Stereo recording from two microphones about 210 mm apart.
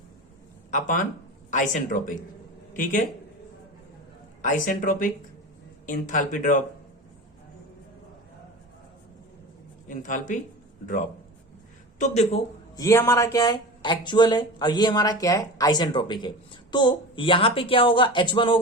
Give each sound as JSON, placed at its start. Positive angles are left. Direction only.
{"t": 0.7, "sound": "speech", "side_deg": 40}
{"t": 4.4, "sound": "speech", "side_deg": 40}
{"t": 9.9, "sound": "speech", "side_deg": 35}
{"t": 11.9, "sound": "speech", "side_deg": 30}
{"t": 12.7, "sound": "speech", "side_deg": 15}